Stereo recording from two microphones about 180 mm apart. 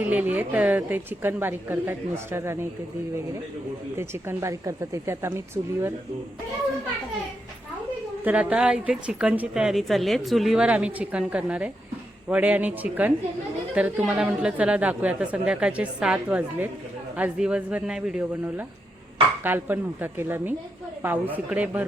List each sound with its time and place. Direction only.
0.0 s a woman's voice: 10° right (ahead or behind)
3.9 s a woman's voice: 15° right (ahead or behind)
8.2 s a woman's voice: 5° right (ahead or behind)